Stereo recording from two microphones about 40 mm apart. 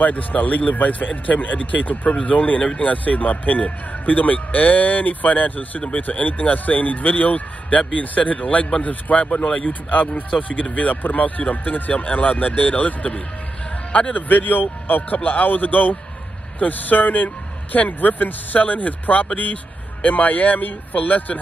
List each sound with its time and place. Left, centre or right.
0.0 s speech: left
9.7 s speech: left
14.1 s speech: left